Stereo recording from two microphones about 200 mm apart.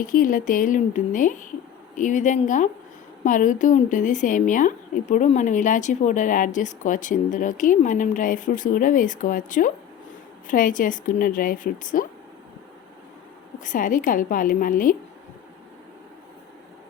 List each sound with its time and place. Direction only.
0.0 s a woman's voice: 45° left (ahead or behind)
13.6 s a woman's voice: 40° left (ahead or behind)